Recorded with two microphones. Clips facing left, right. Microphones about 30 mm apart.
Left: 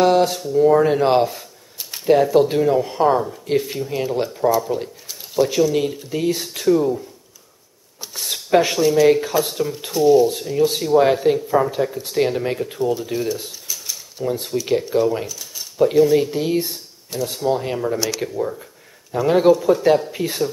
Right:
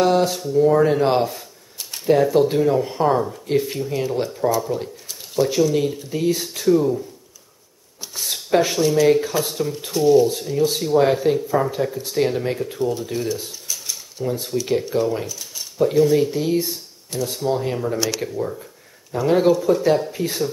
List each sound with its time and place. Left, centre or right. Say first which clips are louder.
0.0 s speech: left 2 dB; centre
1.3 s scissors: even; centre
2.1 s speech: left 1 dB; centre
8.0 s a sound: left 1 dB; centre
8.7 s speech: left 2 dB; centre
12.7 s cutlery: left 2 dB; centre
14.5 s speech: left 2 dB; centre
15.2 s a sound: even; centre
15.8 s speech: left 2 dB; centre
16.3 s speech: even; left